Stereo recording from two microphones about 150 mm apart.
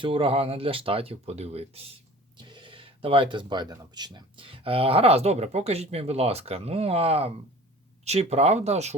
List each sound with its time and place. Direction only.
0.0 s speech: 40° right (ahead or behind)